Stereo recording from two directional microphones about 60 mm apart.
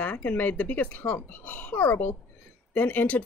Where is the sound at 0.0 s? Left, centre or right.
Left.